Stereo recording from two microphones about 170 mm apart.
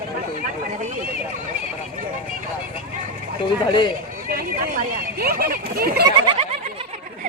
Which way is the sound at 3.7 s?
25° left (ahead or behind).